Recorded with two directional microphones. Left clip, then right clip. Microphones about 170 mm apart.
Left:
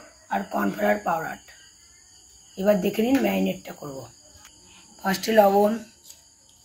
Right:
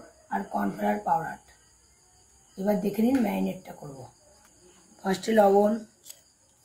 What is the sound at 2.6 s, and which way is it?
Speech, 45° left (ahead or behind).